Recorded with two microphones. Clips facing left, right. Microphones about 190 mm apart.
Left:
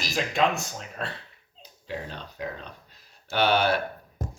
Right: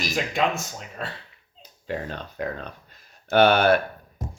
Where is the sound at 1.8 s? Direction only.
55° right (ahead or behind).